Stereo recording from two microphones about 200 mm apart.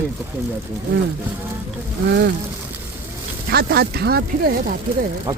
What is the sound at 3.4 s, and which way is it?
Speech, 50° right (ahead or behind).